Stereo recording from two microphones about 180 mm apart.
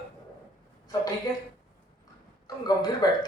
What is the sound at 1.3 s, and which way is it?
Speech, 25° left (ahead or behind).